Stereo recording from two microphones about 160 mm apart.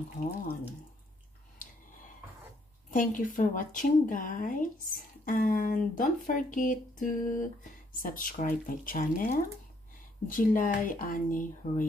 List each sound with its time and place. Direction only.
2.9 s speech: 55° left (ahead or behind)